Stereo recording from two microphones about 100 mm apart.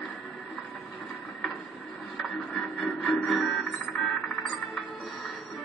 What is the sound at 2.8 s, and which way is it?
Music, centre (ahead or behind).